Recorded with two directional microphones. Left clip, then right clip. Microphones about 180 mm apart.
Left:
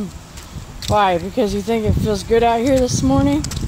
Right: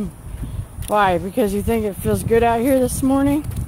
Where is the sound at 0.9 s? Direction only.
5° left (ahead or behind).